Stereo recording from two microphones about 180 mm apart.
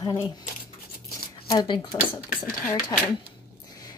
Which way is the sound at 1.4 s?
25° left (ahead or behind).